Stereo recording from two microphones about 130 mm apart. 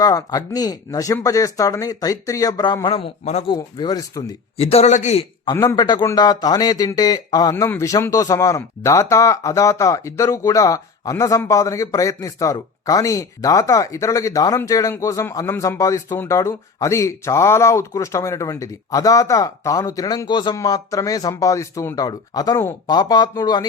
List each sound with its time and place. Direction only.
0.0 s speech: 30° left (ahead or behind); by 3.5 s 50° left (ahead or behind)
3.5 s speech: 30° left (ahead or behind)
4.5 s a man's voice: 50° left (ahead or behind)
5.5 s speech: 30° left (ahead or behind)